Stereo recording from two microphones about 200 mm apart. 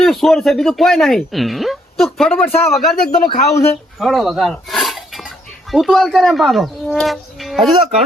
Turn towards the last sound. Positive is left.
turn(degrees=0)  # may be behind; listen again after turning